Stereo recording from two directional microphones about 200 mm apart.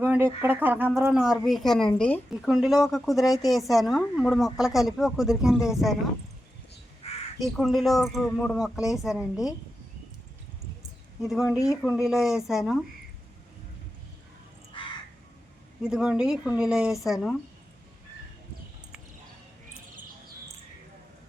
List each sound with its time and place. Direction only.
0.0 s a sound: 10° right (ahead or behind)
0.4 s a woman's voice: 10° right (ahead or behind)
7.3 s a woman's voice: centre (ahead or behind)
11.2 s a woman's voice: centre (ahead or behind)
14.7 s crow: 25° left (ahead or behind)
15.8 s a woman's voice: 5° right (ahead or behind)